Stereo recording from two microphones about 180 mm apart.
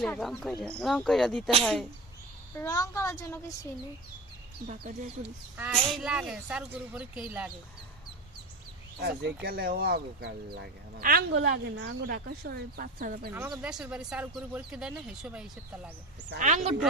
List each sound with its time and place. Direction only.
0.0 s speech: centre (ahead or behind)
2.6 s a woman's voice: 20° left (ahead or behind)
4.7 s speech: 45° right (ahead or behind)
5.2 s speech: 5° right (ahead or behind)
9.0 s speech: 65° right (ahead or behind)
12.1 s speech: 60° right (ahead or behind)
13.3 s speech: 10° right (ahead or behind)
16.4 s speech: 40° right (ahead or behind)